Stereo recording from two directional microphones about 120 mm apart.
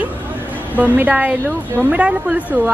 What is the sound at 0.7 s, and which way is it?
Speech, 15° right (ahead or behind).